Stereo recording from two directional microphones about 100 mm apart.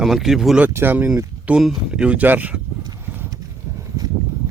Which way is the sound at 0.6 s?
20° right (ahead or behind).